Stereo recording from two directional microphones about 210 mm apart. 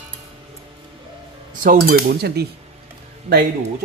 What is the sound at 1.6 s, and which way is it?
Speech, 40° right (ahead or behind).